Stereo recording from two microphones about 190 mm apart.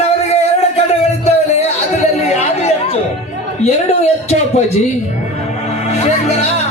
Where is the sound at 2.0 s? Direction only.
35° left (ahead or behind).